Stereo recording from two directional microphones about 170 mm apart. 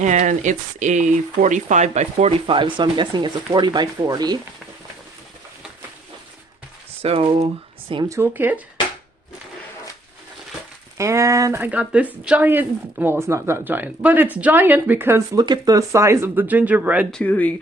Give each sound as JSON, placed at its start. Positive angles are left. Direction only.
{"t": 0.0, "sound": "speech", "side_deg": -45}
{"t": 7.0, "sound": "speech", "side_deg": -35}
{"t": 8.0, "sound": "speech", "side_deg": -15}
{"t": 10.9, "sound": "speech", "side_deg": -15}
{"t": 17.1, "sound": "speech", "side_deg": 5}